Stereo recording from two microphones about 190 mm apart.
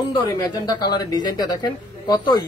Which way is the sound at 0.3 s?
20° left (ahead or behind).